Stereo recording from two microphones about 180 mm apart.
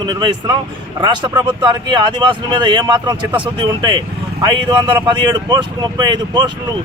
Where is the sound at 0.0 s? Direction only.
25° right (ahead or behind).